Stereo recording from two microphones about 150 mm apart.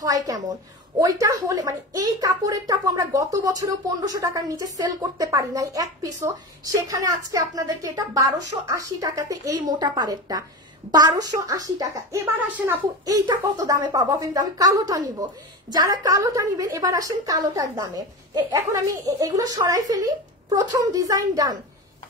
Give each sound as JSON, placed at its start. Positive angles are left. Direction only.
{"t": 0.0, "sound": "a woman's voice", "side_deg": -25}
{"t": 13.0, "sound": "a woman's voice", "side_deg": -25}